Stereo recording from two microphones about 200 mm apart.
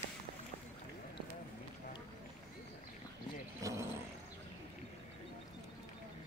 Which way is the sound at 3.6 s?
15° right (ahead or behind).